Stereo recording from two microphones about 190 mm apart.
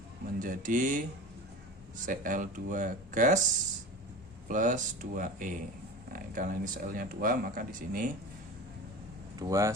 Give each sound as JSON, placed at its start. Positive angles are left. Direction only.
{"t": 0.3, "sound": "speech", "side_deg": -45}
{"t": 2.0, "sound": "speech", "side_deg": -45}
{"t": 4.4, "sound": "speech", "side_deg": -40}
{"t": 9.4, "sound": "speech", "side_deg": -15}